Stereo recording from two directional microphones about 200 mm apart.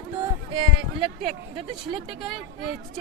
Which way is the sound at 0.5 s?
25° right (ahead or behind).